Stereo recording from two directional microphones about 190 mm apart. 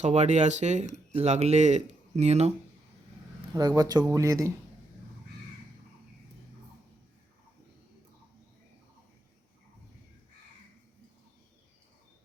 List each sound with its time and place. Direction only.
0.0 s speech: 35° right (ahead or behind)
3.5 s speech: 20° right (ahead or behind)